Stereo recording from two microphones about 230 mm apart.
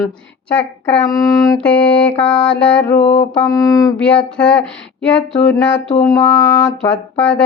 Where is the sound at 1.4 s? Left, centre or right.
Centre.